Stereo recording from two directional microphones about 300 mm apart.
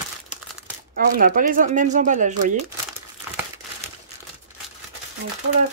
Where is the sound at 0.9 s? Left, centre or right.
Right.